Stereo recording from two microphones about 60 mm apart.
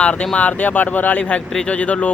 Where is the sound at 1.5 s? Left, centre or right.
Centre.